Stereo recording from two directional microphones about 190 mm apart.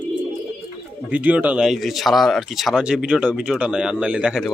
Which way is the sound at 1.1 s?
10° right (ahead or behind).